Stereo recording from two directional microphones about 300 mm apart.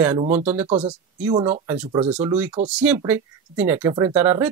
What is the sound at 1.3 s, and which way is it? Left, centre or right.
Speech, centre.